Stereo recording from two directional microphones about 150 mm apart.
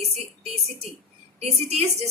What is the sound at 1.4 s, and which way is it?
Speech, 45° right (ahead or behind).